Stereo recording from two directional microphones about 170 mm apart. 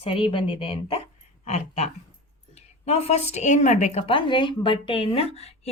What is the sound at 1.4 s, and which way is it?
A woman's voice, 40° left (ahead or behind).